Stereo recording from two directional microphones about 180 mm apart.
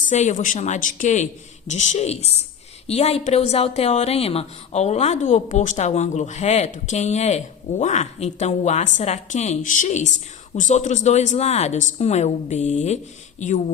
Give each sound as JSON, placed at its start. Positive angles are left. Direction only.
{"t": 0.1, "sound": "a woman's voice", "side_deg": 45}